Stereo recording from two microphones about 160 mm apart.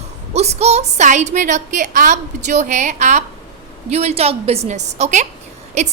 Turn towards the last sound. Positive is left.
turn(degrees=-45)  # may be behind; listen again after turning